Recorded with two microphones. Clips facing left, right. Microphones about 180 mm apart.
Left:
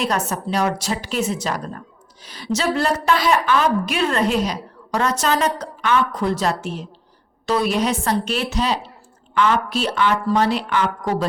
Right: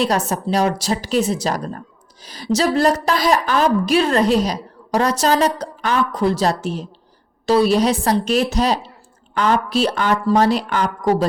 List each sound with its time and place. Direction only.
0.0 s a woman's voice: 35° right (ahead or behind)